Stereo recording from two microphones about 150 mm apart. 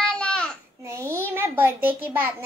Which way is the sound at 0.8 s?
20° right (ahead or behind).